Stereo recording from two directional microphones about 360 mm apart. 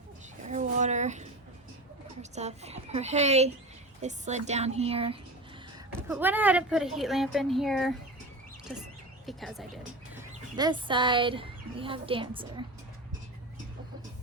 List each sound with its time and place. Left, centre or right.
0.4 s a sound: centre
2.3 s a woman's voice: centre
9.2 s speech: centre
10.6 s a woman's voice: centre